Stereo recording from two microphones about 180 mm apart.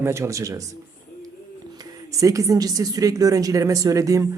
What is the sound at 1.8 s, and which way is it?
Speech, 20° right (ahead or behind).